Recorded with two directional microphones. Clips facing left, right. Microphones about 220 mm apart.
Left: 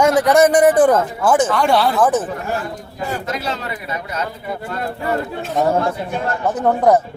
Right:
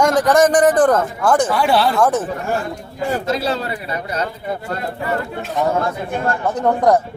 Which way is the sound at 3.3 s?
30° right (ahead or behind).